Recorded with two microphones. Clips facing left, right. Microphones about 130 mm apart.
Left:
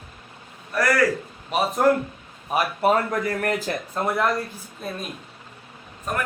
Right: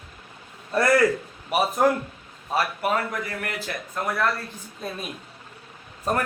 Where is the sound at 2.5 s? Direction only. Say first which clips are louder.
Left 4 dB; 25° left (ahead or behind).